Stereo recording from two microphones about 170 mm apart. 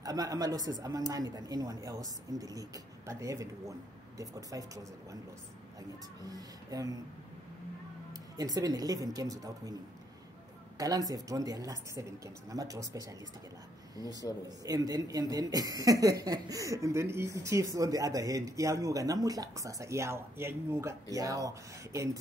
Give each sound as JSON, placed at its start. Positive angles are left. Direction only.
{"t": 0.0, "sound": "speech", "side_deg": -20}
{"t": 8.1, "sound": "speech", "side_deg": -20}
{"t": 10.8, "sound": "speech", "side_deg": -20}